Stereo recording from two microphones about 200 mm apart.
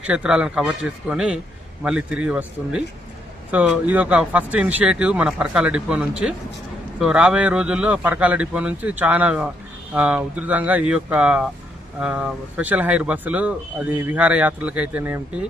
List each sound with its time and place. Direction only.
0.0 s speech: 5° right (ahead or behind)